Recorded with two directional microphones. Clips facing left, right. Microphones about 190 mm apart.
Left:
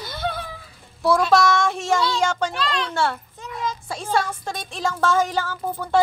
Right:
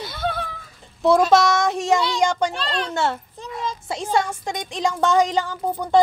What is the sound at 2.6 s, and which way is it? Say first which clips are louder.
Speech: left 1 dB; 35° right (ahead or behind).